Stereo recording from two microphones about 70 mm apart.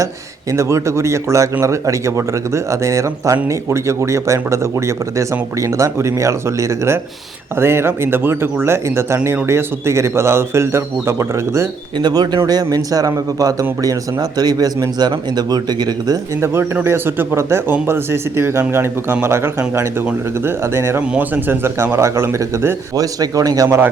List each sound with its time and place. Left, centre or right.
0.5 s speech: right
11.9 s speech: right
12.7 s speech: right
16.4 s speech: right
23.2 s speech: right
23.6 s speech: right